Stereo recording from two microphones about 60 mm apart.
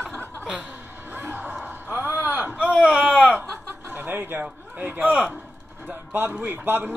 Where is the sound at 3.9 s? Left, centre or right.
Right.